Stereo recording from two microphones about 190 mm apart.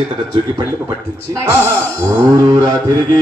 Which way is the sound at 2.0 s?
15° right (ahead or behind).